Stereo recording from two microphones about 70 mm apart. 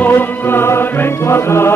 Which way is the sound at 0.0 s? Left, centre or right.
Left.